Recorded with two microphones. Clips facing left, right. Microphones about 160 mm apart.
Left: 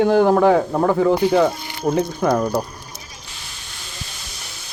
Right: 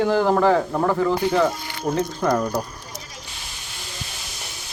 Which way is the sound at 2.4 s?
20° left (ahead or behind).